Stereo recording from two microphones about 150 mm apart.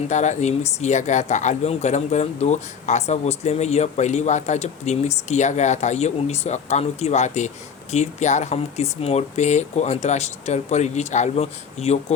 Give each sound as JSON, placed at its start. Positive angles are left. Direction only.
{"t": 0.1, "sound": "speech", "side_deg": 50}